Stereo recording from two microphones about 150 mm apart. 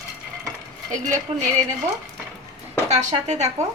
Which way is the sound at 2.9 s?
50° right (ahead or behind).